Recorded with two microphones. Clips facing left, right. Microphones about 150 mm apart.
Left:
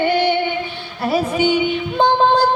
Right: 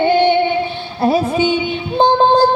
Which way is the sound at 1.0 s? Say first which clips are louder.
Right 3 dB; 30° right (ahead or behind).